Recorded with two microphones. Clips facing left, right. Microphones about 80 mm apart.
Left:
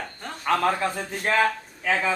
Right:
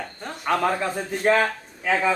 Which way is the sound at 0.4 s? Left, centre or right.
Centre.